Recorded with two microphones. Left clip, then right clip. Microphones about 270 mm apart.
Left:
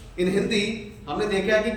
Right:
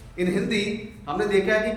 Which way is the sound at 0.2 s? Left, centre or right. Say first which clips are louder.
Left 2 dB; centre.